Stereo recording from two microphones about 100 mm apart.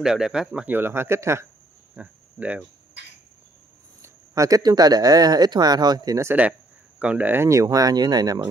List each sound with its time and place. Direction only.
0.0 s speech: 5° right (ahead or behind); by 1.5 s 25° right (ahead or behind)
2.0 s speech: 15° right (ahead or behind)
4.0 s speech: 35° right (ahead or behind)
6.4 s speech: 15° right (ahead or behind)
7.4 s speech: 35° right (ahead or behind)